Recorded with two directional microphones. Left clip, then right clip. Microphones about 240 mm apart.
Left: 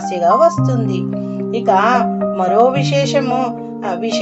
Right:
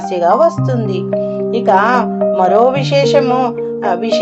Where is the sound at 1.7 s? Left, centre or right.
Right.